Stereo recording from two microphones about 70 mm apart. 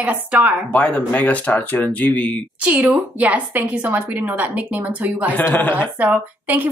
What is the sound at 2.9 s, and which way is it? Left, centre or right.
A woman's voice, centre.